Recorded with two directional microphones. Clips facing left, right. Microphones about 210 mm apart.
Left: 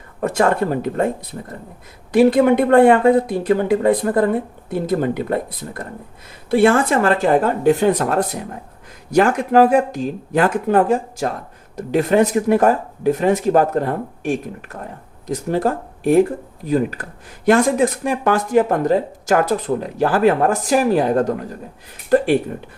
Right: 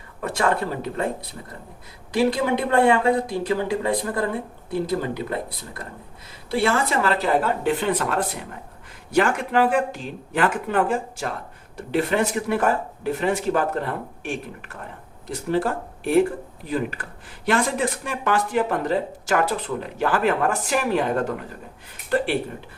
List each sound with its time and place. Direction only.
0.2 s speech: 45° left (ahead or behind)